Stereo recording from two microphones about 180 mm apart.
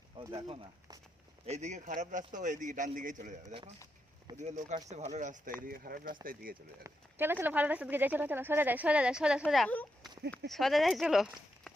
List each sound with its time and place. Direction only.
0.3 s a man's voice: 30° right (ahead or behind)
5.5 s a man's voice: 55° right (ahead or behind)
6.8 s speech: 10° right (ahead or behind)